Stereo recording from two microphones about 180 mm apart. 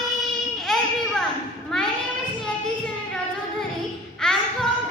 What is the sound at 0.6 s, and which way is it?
Children playing, centre (ahead or behind).